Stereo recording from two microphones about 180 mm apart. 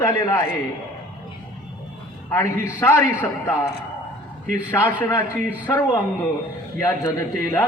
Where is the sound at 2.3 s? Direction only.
15° left (ahead or behind).